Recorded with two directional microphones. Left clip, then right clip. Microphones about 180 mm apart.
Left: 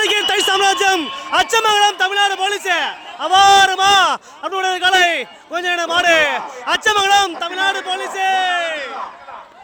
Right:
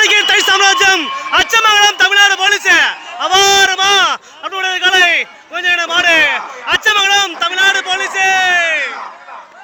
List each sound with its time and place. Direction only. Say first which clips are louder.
0.0 s a man's voice: right 6 dB; 25° left (ahead or behind)